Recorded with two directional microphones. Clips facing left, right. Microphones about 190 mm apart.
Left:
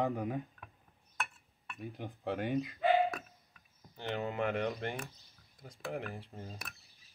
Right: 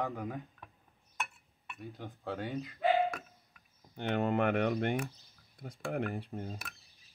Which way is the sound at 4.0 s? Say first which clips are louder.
Right 5 dB; 60° right (ahead or behind).